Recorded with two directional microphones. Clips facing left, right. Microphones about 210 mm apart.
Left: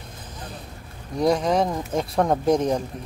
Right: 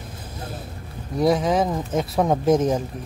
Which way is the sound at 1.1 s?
Centre (ahead or behind).